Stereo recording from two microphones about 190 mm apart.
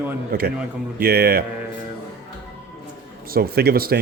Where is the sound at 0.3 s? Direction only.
55° right (ahead or behind).